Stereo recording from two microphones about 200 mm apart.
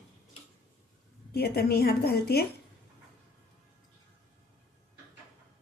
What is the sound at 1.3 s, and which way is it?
A woman's voice, 50° left (ahead or behind).